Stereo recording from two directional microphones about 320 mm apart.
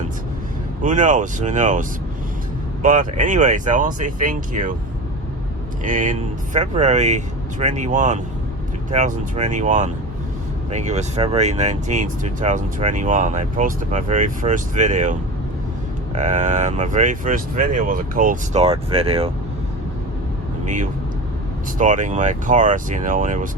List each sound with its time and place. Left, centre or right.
0.8 s speech: right
5.8 s speech: right
16.1 s speech: right
21.8 s speech: right